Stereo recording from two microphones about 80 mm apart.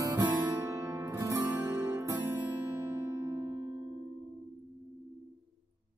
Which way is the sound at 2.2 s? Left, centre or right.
Right.